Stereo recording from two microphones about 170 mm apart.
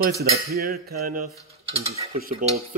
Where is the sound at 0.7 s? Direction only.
65° right (ahead or behind).